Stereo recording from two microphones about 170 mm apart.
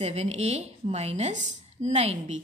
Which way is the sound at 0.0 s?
40° right (ahead or behind).